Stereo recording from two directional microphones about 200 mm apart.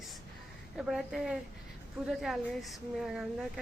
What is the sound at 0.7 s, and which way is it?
Speech, centre (ahead or behind).